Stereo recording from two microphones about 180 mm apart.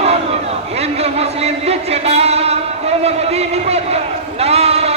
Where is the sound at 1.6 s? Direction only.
35° right (ahead or behind).